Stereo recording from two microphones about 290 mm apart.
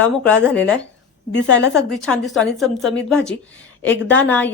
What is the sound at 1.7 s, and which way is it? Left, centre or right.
Speech, centre.